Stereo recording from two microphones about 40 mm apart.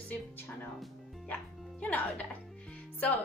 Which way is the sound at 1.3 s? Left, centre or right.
Left.